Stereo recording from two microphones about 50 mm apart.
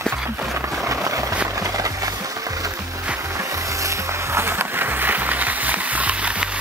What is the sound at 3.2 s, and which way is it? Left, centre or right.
Music, right.